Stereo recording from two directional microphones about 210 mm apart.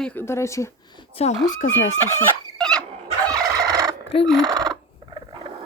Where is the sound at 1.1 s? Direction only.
30° left (ahead or behind).